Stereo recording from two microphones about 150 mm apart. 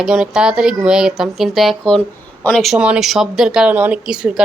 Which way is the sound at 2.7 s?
10° right (ahead or behind).